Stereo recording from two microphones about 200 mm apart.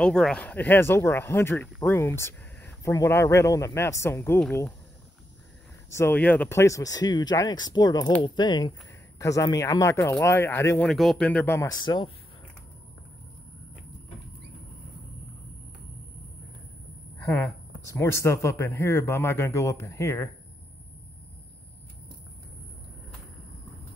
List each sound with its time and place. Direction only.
0.0 s speech: 5° left (ahead or behind)
5.9 s speech: 15° left (ahead or behind)
10.9 s speech: centre (ahead or behind); by 12.1 s 20° left (ahead or behind)
17.2 s speech: 10° left (ahead or behind)